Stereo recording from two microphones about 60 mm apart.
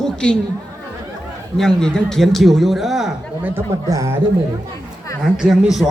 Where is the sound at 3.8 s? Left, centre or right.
Right.